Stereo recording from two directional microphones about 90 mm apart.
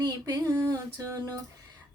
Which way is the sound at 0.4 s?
35° right (ahead or behind).